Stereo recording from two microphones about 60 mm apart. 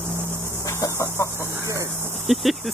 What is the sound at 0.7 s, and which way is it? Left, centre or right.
Chicken, left.